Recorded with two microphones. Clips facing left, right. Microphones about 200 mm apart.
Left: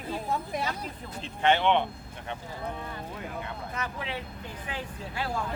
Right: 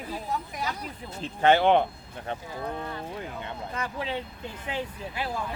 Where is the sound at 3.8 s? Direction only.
30° right (ahead or behind).